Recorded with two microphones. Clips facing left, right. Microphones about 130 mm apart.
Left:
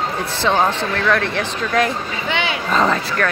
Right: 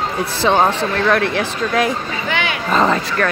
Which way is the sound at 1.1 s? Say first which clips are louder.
Right 3 dB; 10° right (ahead or behind).